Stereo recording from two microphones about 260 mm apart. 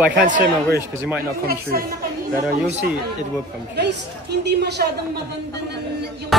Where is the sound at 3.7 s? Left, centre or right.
Right.